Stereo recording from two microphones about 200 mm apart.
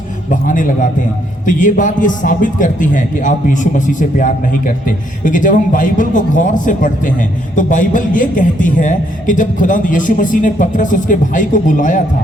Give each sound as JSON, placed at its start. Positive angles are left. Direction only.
{"t": 0.3, "sound": "a man's voice", "side_deg": 40}